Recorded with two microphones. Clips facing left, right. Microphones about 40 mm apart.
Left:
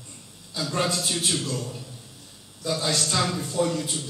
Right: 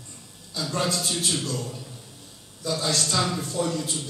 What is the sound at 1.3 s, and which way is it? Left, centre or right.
A man's voice, centre.